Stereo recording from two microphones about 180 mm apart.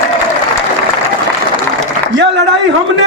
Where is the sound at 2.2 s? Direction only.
80° right.